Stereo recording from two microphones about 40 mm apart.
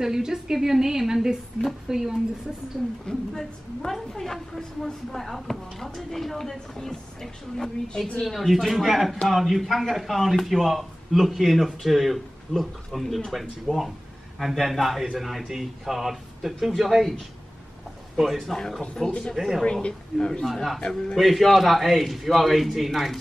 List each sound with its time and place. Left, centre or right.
0.0 s a woman's voice: centre
3.1 s a woman's voice: centre
13.7 s a woman's voice: centre
14.4 s a man's voice: centre
18.2 s a man's voice: centre
19.0 s a woman's voice: centre
19.3 s a man's voice: centre
19.6 s speech: left
20.4 s a man's voice: centre